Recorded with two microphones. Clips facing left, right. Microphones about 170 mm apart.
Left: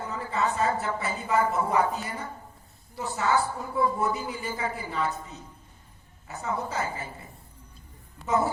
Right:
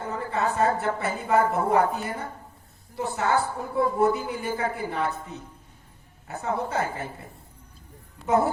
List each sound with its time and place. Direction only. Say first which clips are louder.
0.1 s a woman's voice: right 2 dB; 55° right (ahead or behind)